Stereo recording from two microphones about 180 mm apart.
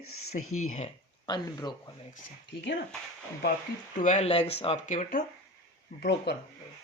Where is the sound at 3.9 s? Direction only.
40° left (ahead or behind).